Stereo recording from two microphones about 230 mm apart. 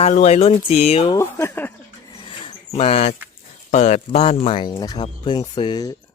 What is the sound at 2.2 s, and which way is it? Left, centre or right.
Dog, left.